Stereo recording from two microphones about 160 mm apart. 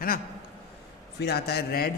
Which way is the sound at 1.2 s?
85° left.